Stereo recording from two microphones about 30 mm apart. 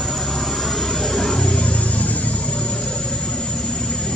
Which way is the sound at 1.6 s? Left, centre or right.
Left.